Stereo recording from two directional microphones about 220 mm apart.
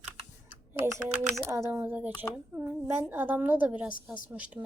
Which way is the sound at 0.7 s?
10° right (ahead or behind).